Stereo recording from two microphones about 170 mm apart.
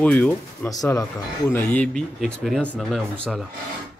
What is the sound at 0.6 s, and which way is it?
Speech, 20° left (ahead or behind).